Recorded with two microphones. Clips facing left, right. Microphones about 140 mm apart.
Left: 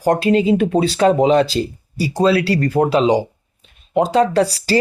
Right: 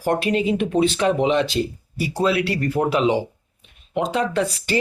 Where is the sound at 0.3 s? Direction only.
35° left (ahead or behind).